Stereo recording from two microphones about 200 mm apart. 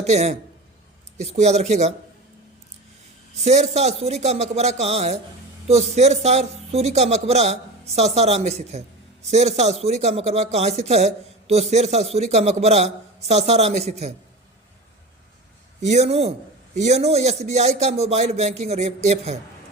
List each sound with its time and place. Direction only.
0.0 s a man's voice: 35° right (ahead or behind)
3.4 s a man's voice: 35° right (ahead or behind)
15.8 s a man's voice: 35° right (ahead or behind)